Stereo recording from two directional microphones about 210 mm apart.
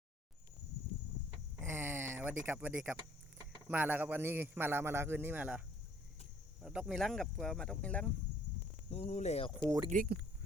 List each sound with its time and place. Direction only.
1.6 s a sound: 10° right (ahead or behind)
3.7 s a man's voice: 10° right (ahead or behind)
8.9 s speech: 30° left (ahead or behind)
9.6 s a man's voice: 15° right (ahead or behind)
9.9 s speech: 40° right (ahead or behind)